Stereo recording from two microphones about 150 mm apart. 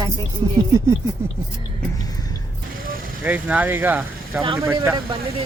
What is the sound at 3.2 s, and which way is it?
Speech, 10° right (ahead or behind).